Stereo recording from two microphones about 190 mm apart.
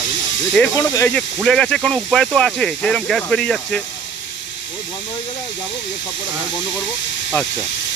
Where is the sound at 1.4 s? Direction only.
5° left (ahead or behind).